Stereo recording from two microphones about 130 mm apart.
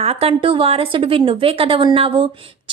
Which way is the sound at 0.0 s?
50° right (ahead or behind).